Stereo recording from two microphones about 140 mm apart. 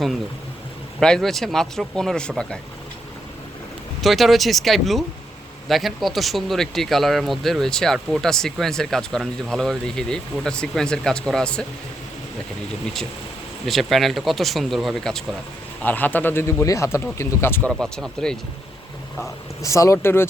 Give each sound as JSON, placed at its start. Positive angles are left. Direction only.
{"t": 0.9, "sound": "speech", "side_deg": 5}
{"t": 4.0, "sound": "speech", "side_deg": 0}
{"t": 13.7, "sound": "speech", "side_deg": 0}
{"t": 17.7, "sound": "speech", "side_deg": 5}
{"t": 19.6, "sound": "speech", "side_deg": 20}